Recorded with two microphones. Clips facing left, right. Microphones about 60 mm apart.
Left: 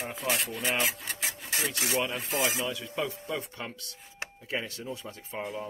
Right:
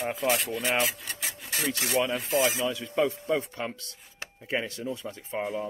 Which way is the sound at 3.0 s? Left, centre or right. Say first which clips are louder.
Right 8 dB; right.